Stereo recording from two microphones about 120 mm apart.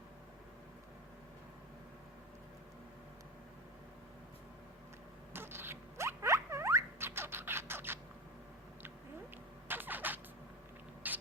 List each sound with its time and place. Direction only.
5.3 s rodents: 20° right (ahead or behind)
9.6 s vehicle: 15° right (ahead or behind)
11.0 s mechanisms: 15° right (ahead or behind)